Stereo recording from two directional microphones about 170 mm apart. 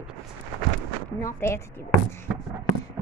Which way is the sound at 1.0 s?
15° left (ahead or behind).